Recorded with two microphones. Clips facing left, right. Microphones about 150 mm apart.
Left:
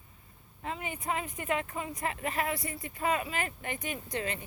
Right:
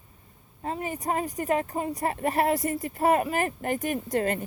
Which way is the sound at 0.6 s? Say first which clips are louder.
Right 6 dB; 40° right (ahead or behind).